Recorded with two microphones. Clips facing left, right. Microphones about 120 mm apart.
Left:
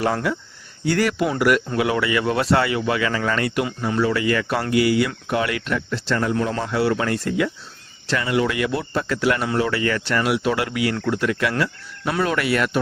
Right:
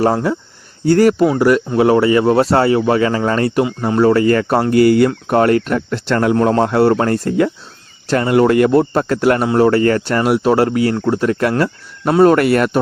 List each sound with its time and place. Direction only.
0.0 s speech: 30° right (ahead or behind)